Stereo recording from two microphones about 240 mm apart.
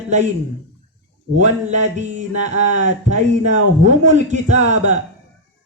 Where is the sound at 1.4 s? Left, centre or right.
Right.